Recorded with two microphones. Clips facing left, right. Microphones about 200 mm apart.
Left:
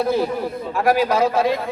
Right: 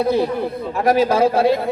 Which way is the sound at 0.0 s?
20° right (ahead or behind).